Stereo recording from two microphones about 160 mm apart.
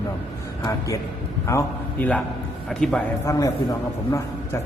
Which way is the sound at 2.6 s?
5° left (ahead or behind).